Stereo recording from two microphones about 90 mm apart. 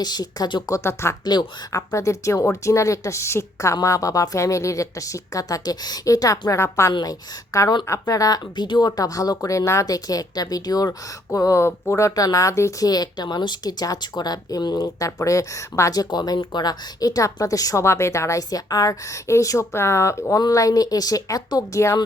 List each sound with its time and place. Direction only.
0.0 s speech: 50° left (ahead or behind)
0.7 s a woman's voice: 30° left (ahead or behind)
1.2 s speech: 50° left (ahead or behind)
1.9 s a woman's voice: 35° left (ahead or behind)
6.9 s speech: 45° left (ahead or behind)
9.0 s a woman's voice: 40° left (ahead or behind)
12.9 s speech: 50° left (ahead or behind)
16.0 s a woman's voice: 50° left (ahead or behind)